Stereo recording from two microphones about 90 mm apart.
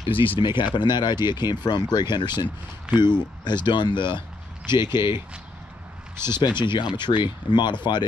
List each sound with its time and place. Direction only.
0.0 s speech: 75° left (ahead or behind)
0.4 s speech: 65° left (ahead or behind)
6.6 s speech: 60° left (ahead or behind)